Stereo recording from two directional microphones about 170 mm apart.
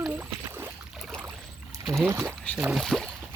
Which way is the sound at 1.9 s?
15° right (ahead or behind).